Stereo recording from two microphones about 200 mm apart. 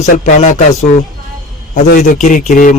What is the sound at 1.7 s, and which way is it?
A man's voice, 40° left (ahead or behind).